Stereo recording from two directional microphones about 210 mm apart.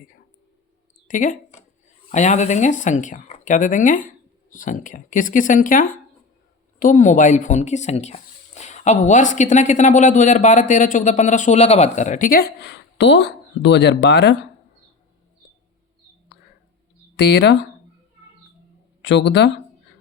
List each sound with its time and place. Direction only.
1.0 s speech: 40° left (ahead or behind); by 14.3 s 55° left (ahead or behind)
17.2 s speech: 55° left (ahead or behind)
19.0 s speech: 55° left (ahead or behind)